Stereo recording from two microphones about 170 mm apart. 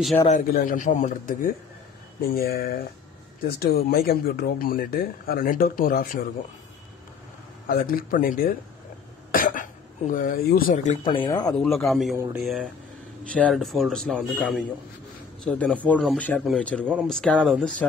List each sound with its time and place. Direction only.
0.3 s a man's voice: 50° left (ahead or behind)
2.2 s speech: 65° left (ahead or behind)
7.6 s speech: 55° left (ahead or behind)
11.1 s speech: 25° left (ahead or behind)
11.5 s speech: centre (ahead or behind)
16.8 s speech: 10° right (ahead or behind)
17.1 s speech: 5° left (ahead or behind)